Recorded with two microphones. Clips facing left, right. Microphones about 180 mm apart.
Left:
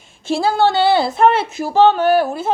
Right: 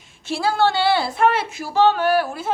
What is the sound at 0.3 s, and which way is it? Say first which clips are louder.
A woman's voice: left 4 dB; 25° left (ahead or behind).